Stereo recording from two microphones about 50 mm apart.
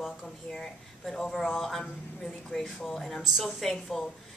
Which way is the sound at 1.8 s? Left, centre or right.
Left.